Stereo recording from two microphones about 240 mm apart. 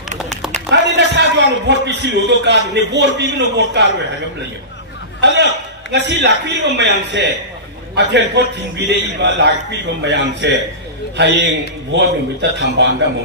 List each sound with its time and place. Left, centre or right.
0.7 s a man's voice: right
5.2 s a man's voice: right